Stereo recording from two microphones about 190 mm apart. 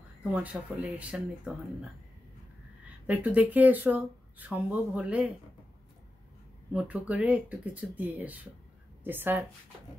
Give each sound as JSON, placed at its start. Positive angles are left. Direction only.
{"t": 0.2, "sound": "speech", "side_deg": -5}
{"t": 3.1, "sound": "speech", "side_deg": -10}
{"t": 6.7, "sound": "speech", "side_deg": -5}